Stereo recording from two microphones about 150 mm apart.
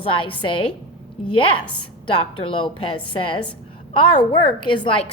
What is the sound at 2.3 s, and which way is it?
A woman's voice, 35° left (ahead or behind).